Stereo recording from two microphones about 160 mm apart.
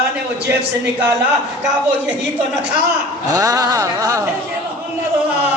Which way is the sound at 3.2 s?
25° right (ahead or behind).